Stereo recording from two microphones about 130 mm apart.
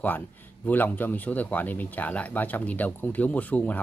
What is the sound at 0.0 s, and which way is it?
Speech, 15° left (ahead or behind).